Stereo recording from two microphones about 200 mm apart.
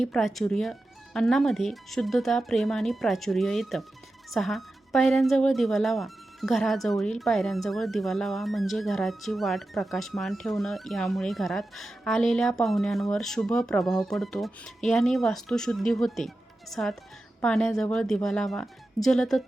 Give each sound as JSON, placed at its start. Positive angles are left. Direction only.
{"t": 0.0, "sound": "speech", "side_deg": 0}